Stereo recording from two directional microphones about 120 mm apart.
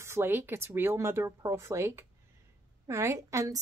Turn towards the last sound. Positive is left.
turn(degrees=-25)  # may be behind; listen again after turning